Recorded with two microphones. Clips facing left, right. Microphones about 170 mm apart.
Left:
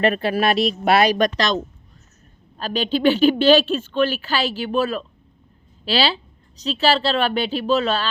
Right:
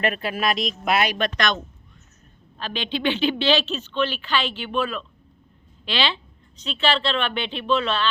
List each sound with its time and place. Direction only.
0.0 s speech: 30° left (ahead or behind)